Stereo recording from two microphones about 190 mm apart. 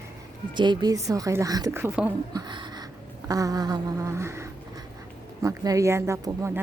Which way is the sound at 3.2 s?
20° right (ahead or behind).